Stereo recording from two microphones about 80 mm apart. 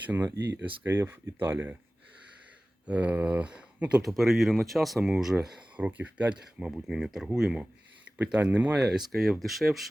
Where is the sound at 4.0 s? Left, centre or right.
Centre.